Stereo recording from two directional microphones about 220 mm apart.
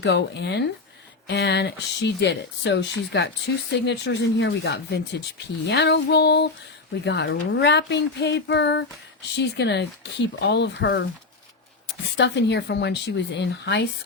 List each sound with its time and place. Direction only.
0.0 s speech: 50° left (ahead or behind)
12.1 s speech: 55° left (ahead or behind)